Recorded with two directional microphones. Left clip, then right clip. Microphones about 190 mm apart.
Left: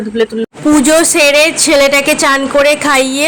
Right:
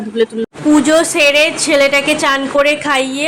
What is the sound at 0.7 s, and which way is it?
A woman's voice, 25° left (ahead or behind).